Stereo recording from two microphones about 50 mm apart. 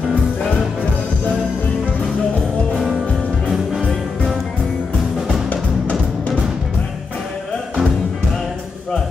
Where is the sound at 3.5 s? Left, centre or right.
Centre.